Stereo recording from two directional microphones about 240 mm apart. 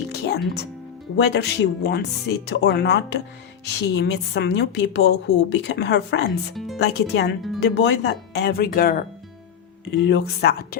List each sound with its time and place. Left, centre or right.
0.1 s music: left
1.1 s a woman's voice: left